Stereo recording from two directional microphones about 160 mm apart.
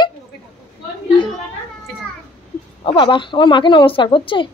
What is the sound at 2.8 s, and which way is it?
A woman's voice, 30° left (ahead or behind).